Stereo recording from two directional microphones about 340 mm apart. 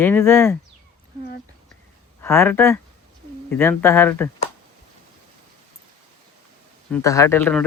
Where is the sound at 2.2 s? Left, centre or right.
Centre.